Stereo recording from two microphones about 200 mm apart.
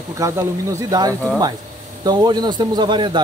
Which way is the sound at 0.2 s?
15° right (ahead or behind).